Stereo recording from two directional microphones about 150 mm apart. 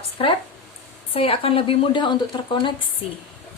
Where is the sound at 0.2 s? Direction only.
35° left (ahead or behind).